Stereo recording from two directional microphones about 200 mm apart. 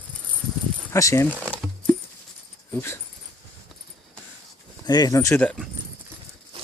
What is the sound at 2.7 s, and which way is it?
Speech, 10° left (ahead or behind).